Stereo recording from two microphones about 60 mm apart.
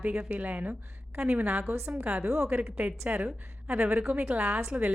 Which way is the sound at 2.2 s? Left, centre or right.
Right.